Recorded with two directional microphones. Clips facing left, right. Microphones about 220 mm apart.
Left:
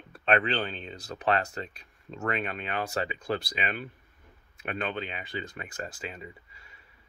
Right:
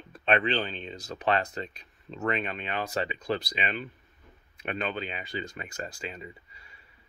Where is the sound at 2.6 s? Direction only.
30° right (ahead or behind).